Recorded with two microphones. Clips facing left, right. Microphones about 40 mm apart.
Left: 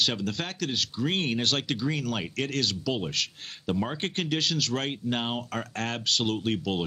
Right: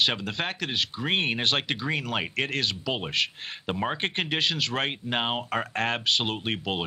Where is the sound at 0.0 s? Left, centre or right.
Right.